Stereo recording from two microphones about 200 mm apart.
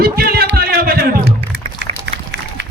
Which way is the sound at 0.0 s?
50° right (ahead or behind).